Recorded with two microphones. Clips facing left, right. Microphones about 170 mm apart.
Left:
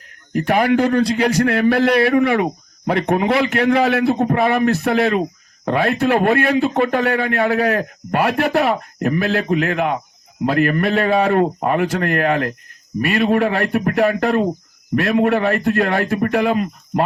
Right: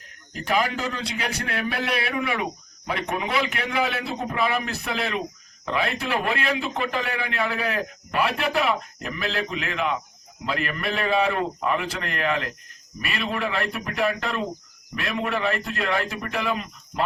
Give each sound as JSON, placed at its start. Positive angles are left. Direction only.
{"t": 0.3, "sound": "a man's voice", "side_deg": 50}